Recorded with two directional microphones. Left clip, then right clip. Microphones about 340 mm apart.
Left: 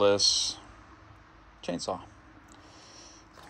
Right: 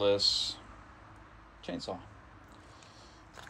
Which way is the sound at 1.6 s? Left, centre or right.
Left.